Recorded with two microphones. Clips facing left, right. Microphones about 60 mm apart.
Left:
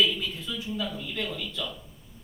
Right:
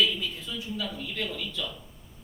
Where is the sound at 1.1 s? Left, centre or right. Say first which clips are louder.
Even; left.